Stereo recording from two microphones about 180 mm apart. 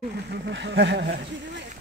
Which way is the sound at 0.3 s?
75° right (ahead or behind).